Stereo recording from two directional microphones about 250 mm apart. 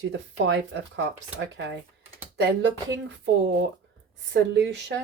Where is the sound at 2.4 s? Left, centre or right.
Right.